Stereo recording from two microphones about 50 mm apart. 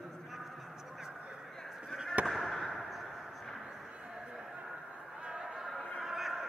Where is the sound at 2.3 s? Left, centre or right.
Centre.